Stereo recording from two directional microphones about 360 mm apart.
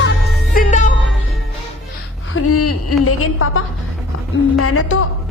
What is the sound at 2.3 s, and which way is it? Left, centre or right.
Speech, left.